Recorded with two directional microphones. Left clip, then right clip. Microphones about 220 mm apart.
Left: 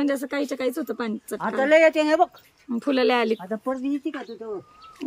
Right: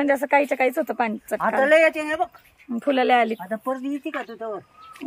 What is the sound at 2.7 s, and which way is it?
Speech, centre (ahead or behind).